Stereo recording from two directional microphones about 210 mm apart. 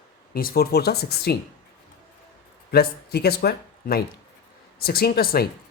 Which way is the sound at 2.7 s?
50° left (ahead or behind).